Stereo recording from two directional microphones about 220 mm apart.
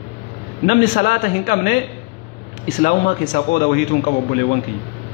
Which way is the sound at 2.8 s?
40° left (ahead or behind).